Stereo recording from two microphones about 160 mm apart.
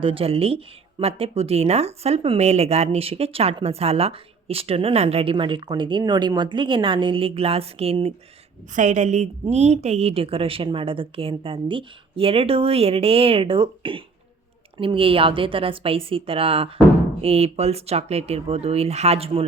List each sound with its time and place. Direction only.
0.0 s speech: 35° right (ahead or behind)
8.7 s a woman's voice: 50° right (ahead or behind)